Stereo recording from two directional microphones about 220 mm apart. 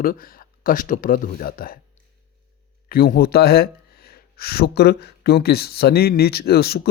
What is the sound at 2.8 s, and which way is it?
Speech, 40° left (ahead or behind).